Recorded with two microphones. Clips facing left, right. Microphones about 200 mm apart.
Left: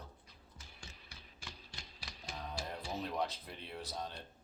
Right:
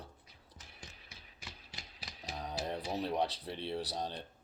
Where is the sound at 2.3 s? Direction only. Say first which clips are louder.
Right 5 dB; 35° right (ahead or behind).